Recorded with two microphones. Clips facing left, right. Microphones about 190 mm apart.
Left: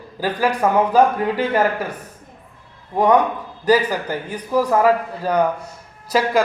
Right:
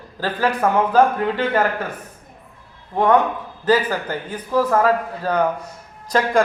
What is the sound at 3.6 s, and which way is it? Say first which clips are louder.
A man's voice: left 1 dB; 10° left (ahead or behind).